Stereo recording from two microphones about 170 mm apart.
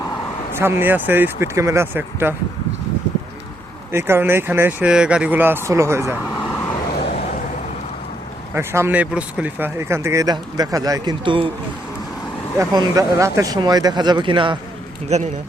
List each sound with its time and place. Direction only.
0.5 s speech: 15° right (ahead or behind)
3.9 s speech: 15° right (ahead or behind)
8.5 s speech: 15° right (ahead or behind)
12.5 s speech: 20° right (ahead or behind)
15.1 s speech: 40° right (ahead or behind)